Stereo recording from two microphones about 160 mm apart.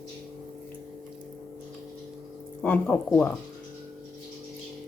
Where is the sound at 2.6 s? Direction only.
5° left (ahead or behind).